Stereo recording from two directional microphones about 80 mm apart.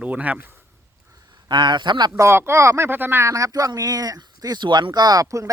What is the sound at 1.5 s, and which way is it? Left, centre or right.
Speech, right.